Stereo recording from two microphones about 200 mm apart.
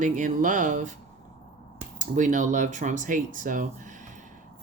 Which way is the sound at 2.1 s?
40° right (ahead or behind).